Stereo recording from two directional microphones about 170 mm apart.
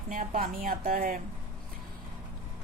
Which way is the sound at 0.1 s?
50° right (ahead or behind).